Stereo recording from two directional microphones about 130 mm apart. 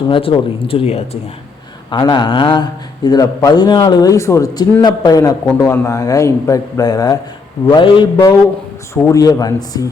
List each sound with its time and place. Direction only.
0.1 s speech: 45° left (ahead or behind)
1.9 s a man's voice: 35° left (ahead or behind)
5.5 s a man's voice: 20° left (ahead or behind); by 8.0 s 40° left (ahead or behind)
8.1 s a man's voice: 30° left (ahead or behind)